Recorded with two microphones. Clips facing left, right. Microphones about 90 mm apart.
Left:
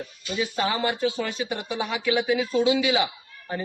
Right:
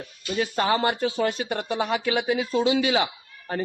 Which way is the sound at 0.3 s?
50° right (ahead or behind).